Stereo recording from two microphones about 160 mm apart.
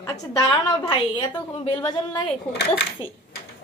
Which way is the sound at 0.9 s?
30° left (ahead or behind).